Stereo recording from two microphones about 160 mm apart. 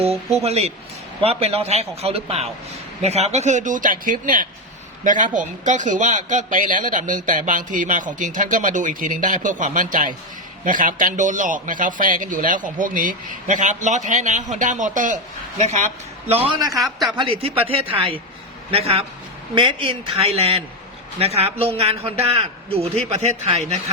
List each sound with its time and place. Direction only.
0.0 s a man's voice: 40° right (ahead or behind)
16.3 s a man's voice: 35° right (ahead or behind)
16.7 s a man's voice: centre (ahead or behind)
17.1 s a man's voice: 30° right (ahead or behind)